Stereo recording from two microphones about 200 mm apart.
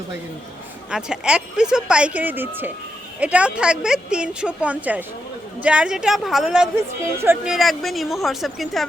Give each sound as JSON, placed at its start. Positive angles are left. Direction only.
{"t": 0.9, "sound": "speech", "side_deg": -5}